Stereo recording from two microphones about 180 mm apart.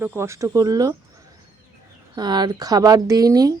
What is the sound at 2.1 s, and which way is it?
Speech, 25° right (ahead or behind).